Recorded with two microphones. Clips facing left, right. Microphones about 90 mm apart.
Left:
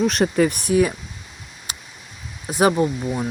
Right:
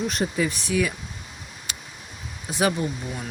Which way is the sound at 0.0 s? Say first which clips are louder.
Left 7 dB; 80° left.